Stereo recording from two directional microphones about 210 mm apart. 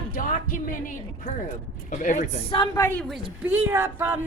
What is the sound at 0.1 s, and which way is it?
Music, 40° left (ahead or behind).